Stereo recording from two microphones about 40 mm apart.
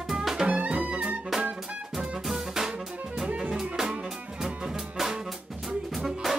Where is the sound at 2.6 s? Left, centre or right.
Centre.